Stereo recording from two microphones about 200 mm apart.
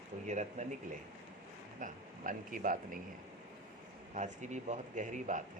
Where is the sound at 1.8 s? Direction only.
40° right (ahead or behind).